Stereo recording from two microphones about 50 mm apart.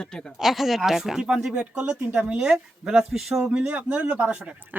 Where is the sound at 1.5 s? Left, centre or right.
Centre.